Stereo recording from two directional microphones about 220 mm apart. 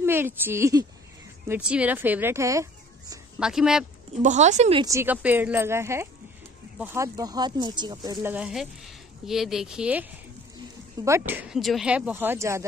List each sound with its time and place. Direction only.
0.0 s speech: 10° right (ahead or behind)
3.3 s speech: 5° right (ahead or behind)
4.2 s speech: 30° right (ahead or behind)
4.8 s speech: 10° right (ahead or behind)